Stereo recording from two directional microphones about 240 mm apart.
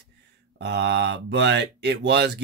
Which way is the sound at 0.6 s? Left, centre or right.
Right.